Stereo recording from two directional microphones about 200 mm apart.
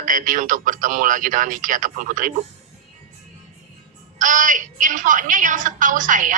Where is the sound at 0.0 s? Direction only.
40° right (ahead or behind).